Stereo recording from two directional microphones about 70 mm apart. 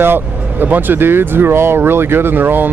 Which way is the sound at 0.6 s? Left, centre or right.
Right.